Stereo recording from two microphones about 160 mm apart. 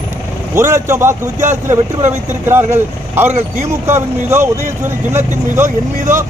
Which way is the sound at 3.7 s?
15° right (ahead or behind).